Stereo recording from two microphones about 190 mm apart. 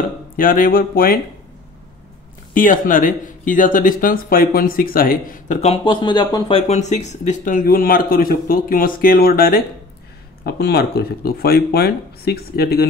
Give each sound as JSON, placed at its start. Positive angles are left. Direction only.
{"t": 0.4, "sound": "speech", "side_deg": 45}
{"t": 2.5, "sound": "speech", "side_deg": 45}
{"t": 5.6, "sound": "speech", "side_deg": 30}
{"t": 6.7, "sound": "speech", "side_deg": 35}